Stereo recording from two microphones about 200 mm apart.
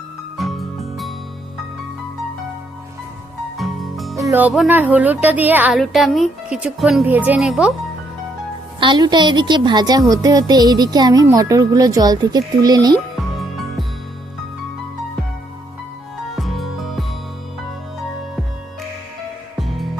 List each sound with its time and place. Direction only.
0.3 s music: centre (ahead or behind)
3.6 s music: centre (ahead or behind)
4.2 s speech: 10° right (ahead or behind)
8.8 s speech: 20° right (ahead or behind)
13.4 s music: centre (ahead or behind)
16.3 s music: centre (ahead or behind)
19.5 s music: centre (ahead or behind)